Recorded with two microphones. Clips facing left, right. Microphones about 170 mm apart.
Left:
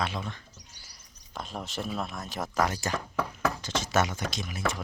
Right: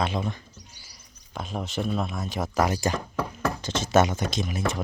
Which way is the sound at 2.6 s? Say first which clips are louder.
Right 5 dB; 15° right (ahead or behind).